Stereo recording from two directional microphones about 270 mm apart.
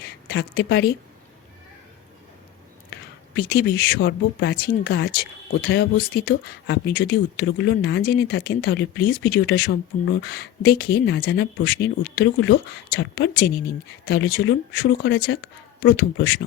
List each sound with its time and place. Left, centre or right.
0.0 s speech: left
3.3 s speech: left